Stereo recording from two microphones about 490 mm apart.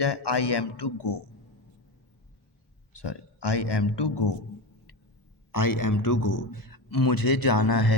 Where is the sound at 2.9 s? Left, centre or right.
Left.